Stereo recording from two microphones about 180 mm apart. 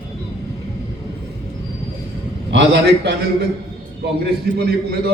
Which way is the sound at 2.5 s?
75° right (ahead or behind).